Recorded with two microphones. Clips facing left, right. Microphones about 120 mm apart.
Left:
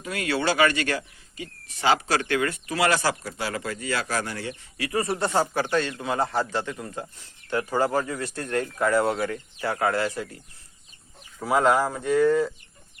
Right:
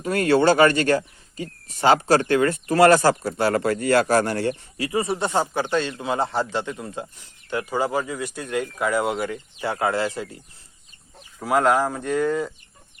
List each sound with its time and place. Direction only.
0.0 s speech: 45° right (ahead or behind)
4.8 s a man's voice: 20° right (ahead or behind)
7.5 s speech: 10° right (ahead or behind)
11.3 s speech: centre (ahead or behind)